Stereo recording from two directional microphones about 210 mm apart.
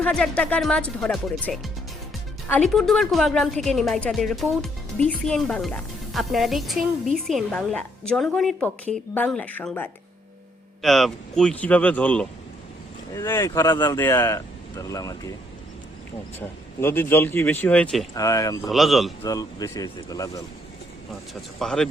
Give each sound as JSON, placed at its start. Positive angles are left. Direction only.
{"t": 0.0, "sound": "a woman's voice", "side_deg": 5}
{"t": 16.8, "sound": "speech", "side_deg": 10}
{"t": 18.7, "sound": "a woman's voice", "side_deg": 0}
{"t": 19.2, "sound": "speech", "side_deg": 15}
{"t": 21.6, "sound": "a woman's voice", "side_deg": 5}